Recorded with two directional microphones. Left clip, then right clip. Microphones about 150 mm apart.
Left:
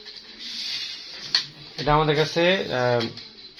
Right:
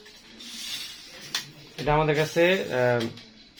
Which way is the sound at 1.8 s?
30° left (ahead or behind).